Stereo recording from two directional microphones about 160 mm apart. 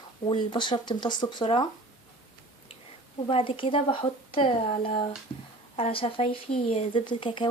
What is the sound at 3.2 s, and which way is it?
A woman's voice, 35° left (ahead or behind).